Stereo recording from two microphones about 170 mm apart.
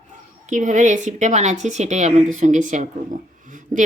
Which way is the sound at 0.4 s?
45° right (ahead or behind).